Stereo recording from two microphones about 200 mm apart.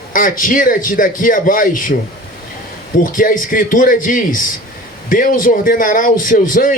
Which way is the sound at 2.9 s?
45° left (ahead or behind).